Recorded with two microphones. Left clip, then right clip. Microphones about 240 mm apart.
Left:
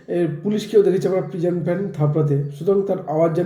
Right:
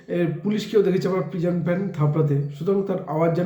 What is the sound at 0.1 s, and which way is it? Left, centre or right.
Speech, centre.